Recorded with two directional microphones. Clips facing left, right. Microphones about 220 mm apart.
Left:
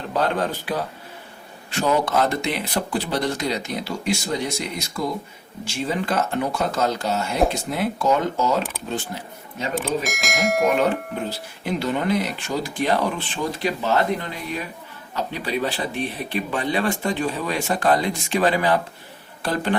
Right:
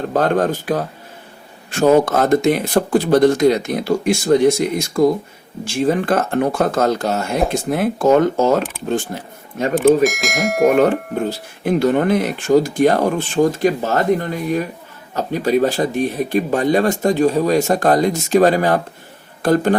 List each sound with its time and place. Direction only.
0.1 s speech: 45° right (ahead or behind)
10.0 s speech: centre (ahead or behind)
10.7 s speech: 50° right (ahead or behind)